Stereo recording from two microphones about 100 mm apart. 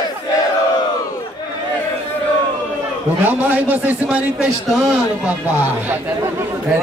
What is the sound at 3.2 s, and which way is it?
A man's voice, 20° right (ahead or behind).